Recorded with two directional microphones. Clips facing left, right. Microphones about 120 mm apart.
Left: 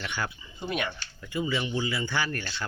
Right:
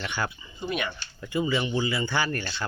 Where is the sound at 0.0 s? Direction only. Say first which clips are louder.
Right 3 dB; 15° right (ahead or behind).